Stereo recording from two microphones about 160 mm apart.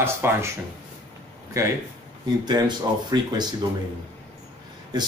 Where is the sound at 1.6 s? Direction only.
20° right (ahead or behind).